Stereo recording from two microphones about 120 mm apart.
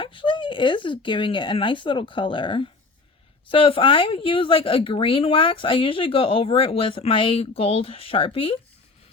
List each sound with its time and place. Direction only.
0.0 s speech: 45° left (ahead or behind)